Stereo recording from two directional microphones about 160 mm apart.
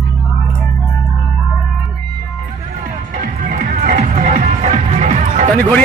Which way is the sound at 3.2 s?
55° right (ahead or behind).